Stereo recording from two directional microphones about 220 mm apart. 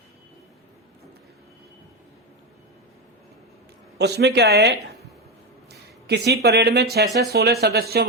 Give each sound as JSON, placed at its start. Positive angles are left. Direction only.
{"t": 3.9, "sound": "speech", "side_deg": -50}